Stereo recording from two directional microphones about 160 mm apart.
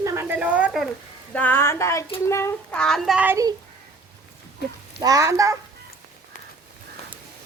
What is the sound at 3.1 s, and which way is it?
Speech, 10° right (ahead or behind).